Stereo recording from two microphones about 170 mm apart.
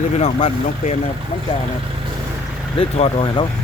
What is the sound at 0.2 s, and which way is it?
Speech, 35° left (ahead or behind).